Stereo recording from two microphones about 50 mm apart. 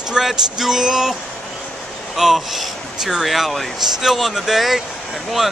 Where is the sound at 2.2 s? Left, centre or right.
Centre.